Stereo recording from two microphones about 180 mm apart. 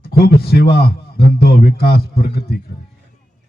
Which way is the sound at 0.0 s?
60° left (ahead or behind).